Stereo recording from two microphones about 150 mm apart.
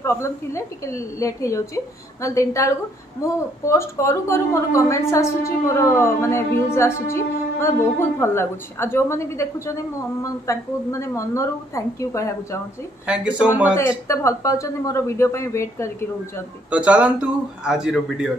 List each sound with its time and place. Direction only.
0.0 s a woman's voice: 20° left (ahead or behind)
13.0 s speech: 10° right (ahead or behind)
13.7 s a woman's voice: 20° left (ahead or behind)
16.7 s speech: 10° right (ahead or behind)